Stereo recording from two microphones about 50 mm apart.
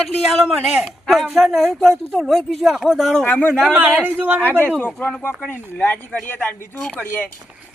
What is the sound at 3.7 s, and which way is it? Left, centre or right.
Speech, right.